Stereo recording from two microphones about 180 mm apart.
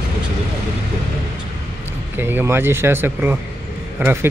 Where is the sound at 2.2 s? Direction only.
10° right (ahead or behind).